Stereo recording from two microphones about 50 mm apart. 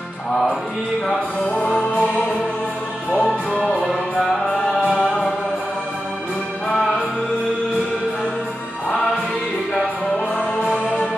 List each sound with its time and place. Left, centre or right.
1.7 s music: left
4.9 s music: centre
6.7 s music: centre